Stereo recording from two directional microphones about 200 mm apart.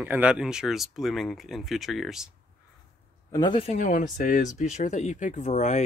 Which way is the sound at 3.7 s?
40° left (ahead or behind).